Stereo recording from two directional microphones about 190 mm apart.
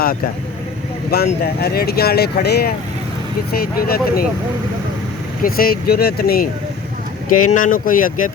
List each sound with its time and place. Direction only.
1.1 s speech: 55° left (ahead or behind)
5.4 s speech: 50° left (ahead or behind)